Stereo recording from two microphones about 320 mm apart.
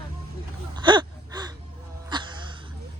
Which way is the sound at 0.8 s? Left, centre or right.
Centre.